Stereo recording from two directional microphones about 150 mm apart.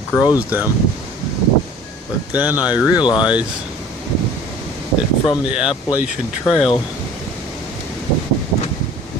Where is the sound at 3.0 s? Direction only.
30° left (ahead or behind).